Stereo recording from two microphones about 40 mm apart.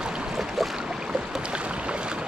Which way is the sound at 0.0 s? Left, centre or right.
Right.